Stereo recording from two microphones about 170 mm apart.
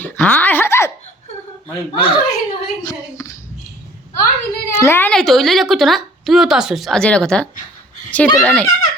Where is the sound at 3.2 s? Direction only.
20° left (ahead or behind).